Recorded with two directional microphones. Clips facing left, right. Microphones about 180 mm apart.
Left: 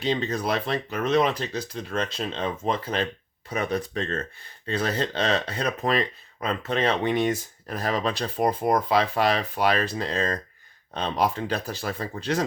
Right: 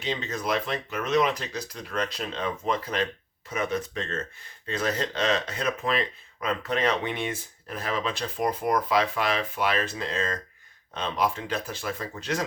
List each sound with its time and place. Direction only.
0.0 s speech: 35° left (ahead or behind)